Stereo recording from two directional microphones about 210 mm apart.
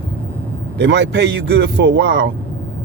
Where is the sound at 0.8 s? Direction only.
55° right (ahead or behind).